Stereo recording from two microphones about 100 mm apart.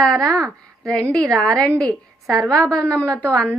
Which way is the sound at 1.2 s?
35° right (ahead or behind).